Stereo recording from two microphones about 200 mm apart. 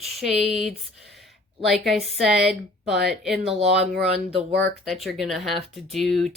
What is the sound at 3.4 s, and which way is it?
Speech, 30° right (ahead or behind).